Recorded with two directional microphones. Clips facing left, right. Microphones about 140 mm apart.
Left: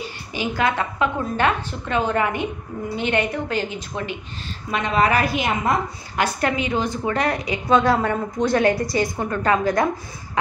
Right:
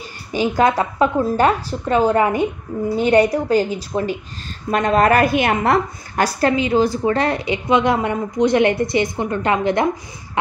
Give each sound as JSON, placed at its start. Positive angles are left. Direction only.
{"t": 0.4, "sound": "a woman's voice", "side_deg": -40}
{"t": 6.1, "sound": "a woman's voice", "side_deg": -35}